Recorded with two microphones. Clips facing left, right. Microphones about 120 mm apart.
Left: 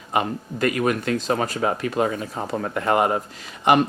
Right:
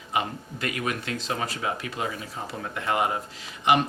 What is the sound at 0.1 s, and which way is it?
Speech, 45° left (ahead or behind).